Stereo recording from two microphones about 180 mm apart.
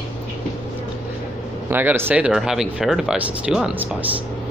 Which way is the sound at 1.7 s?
10° right (ahead or behind).